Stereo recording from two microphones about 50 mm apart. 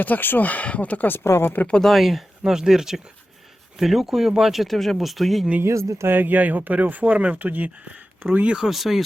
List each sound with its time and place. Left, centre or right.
0.0 s speech: left
1.1 s speech: left
1.8 s speech: centre
2.4 s speech: centre
5.6 s speech: right
6.1 s speech: right
8.7 s speech: centre